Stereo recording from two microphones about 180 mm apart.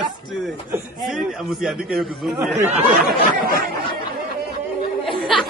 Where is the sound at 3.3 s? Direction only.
55° right (ahead or behind).